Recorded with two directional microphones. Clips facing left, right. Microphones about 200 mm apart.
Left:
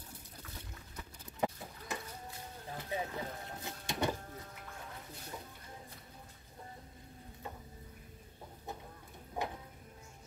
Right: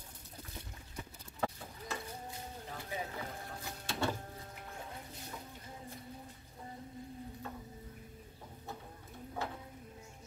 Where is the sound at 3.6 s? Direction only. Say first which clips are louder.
Left 1 dB; 20° left (ahead or behind).